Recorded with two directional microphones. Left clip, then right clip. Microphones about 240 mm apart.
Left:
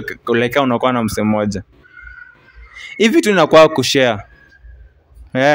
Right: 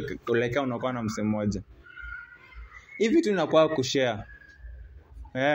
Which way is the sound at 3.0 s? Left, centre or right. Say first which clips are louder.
Left 12 dB; left.